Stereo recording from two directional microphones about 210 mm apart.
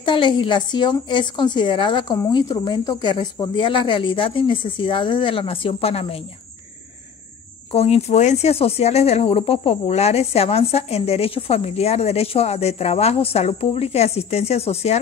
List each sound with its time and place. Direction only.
0.0 s speech: 25° left (ahead or behind)
7.7 s speech: 30° left (ahead or behind)